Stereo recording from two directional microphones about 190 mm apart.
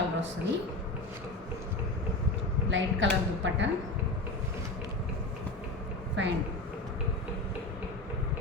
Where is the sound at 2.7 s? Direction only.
75° right (ahead or behind).